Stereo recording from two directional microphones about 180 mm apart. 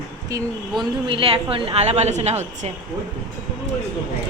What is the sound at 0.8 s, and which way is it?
A woman's voice, 30° right (ahead or behind).